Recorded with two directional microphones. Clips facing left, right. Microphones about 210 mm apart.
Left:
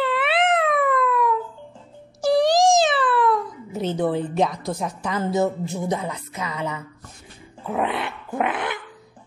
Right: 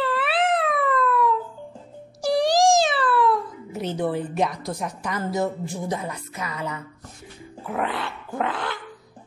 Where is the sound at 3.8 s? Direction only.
25° left (ahead or behind).